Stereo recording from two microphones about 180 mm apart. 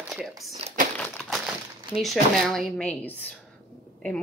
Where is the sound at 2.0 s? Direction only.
Centre (ahead or behind).